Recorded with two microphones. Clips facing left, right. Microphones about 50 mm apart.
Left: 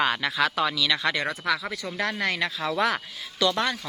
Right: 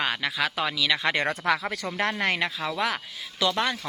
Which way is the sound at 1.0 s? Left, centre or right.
Right.